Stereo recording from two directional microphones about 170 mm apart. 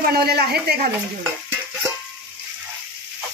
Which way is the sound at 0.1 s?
70° right (ahead or behind).